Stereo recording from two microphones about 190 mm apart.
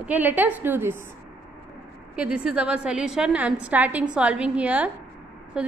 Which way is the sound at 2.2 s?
5° right (ahead or behind).